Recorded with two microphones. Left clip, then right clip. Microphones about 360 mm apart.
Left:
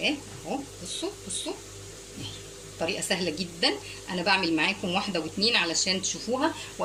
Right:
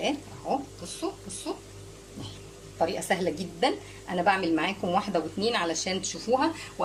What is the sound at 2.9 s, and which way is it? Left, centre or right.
Speech, right.